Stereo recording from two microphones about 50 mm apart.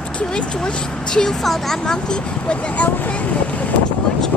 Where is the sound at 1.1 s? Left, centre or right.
Centre.